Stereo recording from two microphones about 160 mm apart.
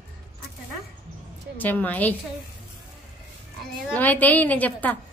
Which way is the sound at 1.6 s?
10° left (ahead or behind).